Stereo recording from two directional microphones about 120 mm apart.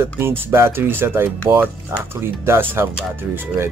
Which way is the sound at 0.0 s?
20° right (ahead or behind).